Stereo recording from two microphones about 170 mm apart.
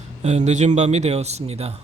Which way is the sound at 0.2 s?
40° right (ahead or behind).